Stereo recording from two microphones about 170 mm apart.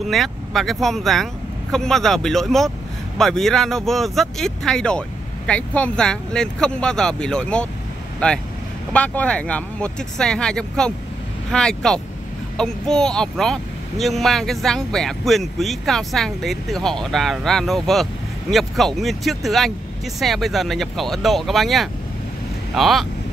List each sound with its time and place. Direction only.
0.0 s speech: centre (ahead or behind)